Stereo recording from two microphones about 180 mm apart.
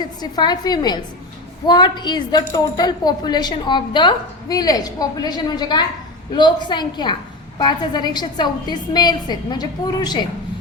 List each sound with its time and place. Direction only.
0.0 s speech: 25° left (ahead or behind)